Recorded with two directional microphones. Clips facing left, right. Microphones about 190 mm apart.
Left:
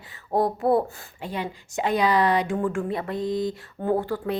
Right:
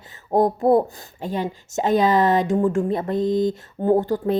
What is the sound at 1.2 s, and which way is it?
Speech, 45° right (ahead or behind).